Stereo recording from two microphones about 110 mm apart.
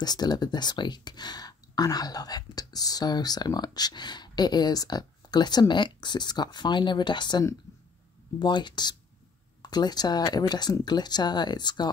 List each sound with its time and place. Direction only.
0.0 s speech: 40° left (ahead or behind)